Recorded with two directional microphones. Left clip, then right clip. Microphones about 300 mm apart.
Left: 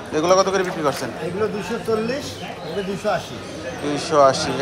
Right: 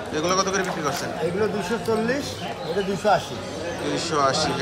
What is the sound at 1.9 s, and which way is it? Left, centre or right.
Speech, centre.